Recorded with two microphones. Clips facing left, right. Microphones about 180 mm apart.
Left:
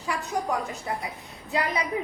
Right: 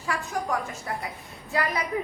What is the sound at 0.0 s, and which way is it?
A woman's voice, 20° left (ahead or behind).